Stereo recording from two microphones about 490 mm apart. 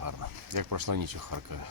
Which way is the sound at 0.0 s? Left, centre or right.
Right.